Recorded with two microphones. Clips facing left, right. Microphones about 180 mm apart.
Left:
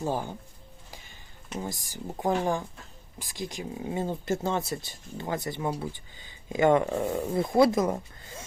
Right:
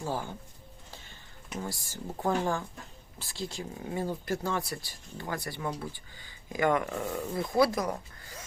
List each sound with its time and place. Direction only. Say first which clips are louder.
0.0 s speech: left 4 dB; 20° left (ahead or behind)
1.6 s speech: left 2 dB; 20° left (ahead or behind)